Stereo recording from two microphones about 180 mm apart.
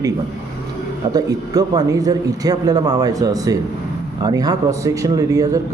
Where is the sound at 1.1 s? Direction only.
20° right (ahead or behind).